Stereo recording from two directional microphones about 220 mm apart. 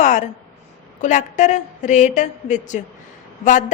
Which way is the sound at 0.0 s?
35° left (ahead or behind).